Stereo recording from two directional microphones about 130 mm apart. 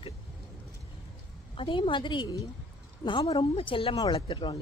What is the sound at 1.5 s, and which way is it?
Speech, 40° left (ahead or behind).